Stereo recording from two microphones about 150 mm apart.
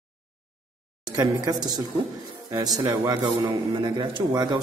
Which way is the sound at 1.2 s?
25° right (ahead or behind).